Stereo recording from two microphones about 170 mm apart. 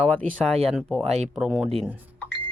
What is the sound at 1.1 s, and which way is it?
Speech, 40° right (ahead or behind).